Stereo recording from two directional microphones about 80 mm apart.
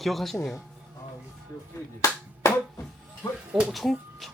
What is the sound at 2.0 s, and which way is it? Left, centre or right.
Music, left.